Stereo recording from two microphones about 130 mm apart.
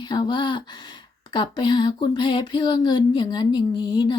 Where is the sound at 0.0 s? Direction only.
35° left (ahead or behind).